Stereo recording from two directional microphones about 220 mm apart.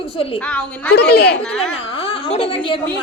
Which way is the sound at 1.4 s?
5° left (ahead or behind).